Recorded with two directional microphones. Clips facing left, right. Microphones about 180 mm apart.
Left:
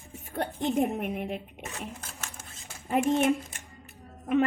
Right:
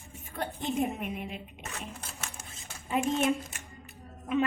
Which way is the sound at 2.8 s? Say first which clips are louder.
Left 3 dB; 55° left (ahead or behind).